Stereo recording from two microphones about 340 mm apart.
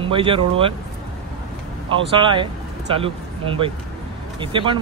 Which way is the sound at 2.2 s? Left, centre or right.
Centre.